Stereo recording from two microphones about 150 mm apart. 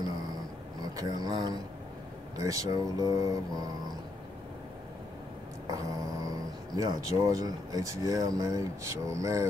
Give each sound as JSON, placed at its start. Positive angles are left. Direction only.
{"t": 0.9, "sound": "speech", "side_deg": -25}
{"t": 5.7, "sound": "speech", "side_deg": -25}